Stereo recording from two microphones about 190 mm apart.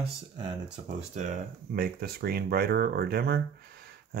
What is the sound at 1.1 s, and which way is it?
Speech, 40° right (ahead or behind).